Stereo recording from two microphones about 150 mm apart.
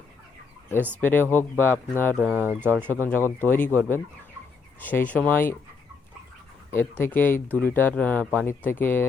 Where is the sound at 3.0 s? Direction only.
15° left (ahead or behind).